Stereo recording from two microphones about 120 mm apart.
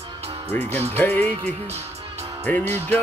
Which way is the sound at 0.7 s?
15° left (ahead or behind).